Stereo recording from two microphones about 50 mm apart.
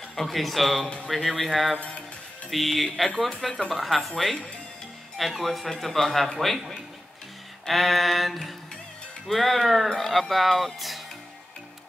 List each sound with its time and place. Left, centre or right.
0.1 s speech: centre
1.8 s speech: left
2.5 s speech: centre